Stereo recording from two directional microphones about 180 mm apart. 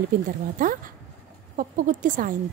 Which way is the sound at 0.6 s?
50° right (ahead or behind).